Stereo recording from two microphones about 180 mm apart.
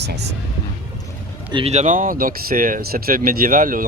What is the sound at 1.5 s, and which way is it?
Speech, 35° right (ahead or behind).